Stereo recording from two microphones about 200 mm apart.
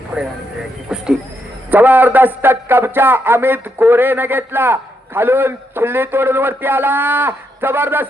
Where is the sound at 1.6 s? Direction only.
10° right (ahead or behind).